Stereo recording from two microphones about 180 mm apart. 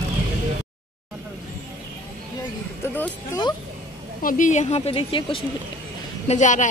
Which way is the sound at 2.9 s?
10° left (ahead or behind).